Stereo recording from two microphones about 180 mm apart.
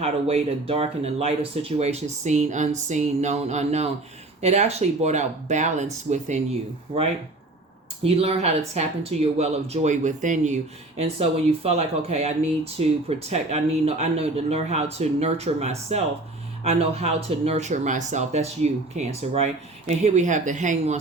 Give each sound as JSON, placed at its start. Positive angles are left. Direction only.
{"t": 0.0, "sound": "speech", "side_deg": -35}